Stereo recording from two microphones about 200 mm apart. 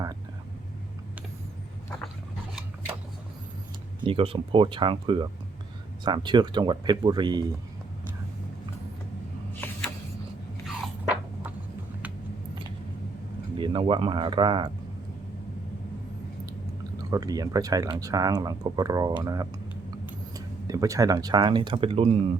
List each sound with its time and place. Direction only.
4.0 s speech: 25° right (ahead or behind)
10.7 s a sound: 5° right (ahead or behind)
13.6 s speech: 25° right (ahead or behind)
17.0 s speech: 20° right (ahead or behind)
20.7 s speech: 15° right (ahead or behind)